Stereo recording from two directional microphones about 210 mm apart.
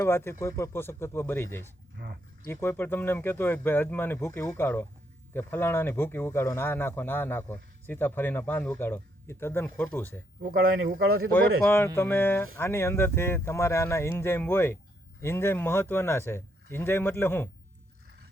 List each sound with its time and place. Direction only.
0.0 s speech: 10° left (ahead or behind)
10.7 s speech: 70° right (ahead or behind)
11.0 s speech: 80° right
11.3 s speech: 10° left (ahead or behind)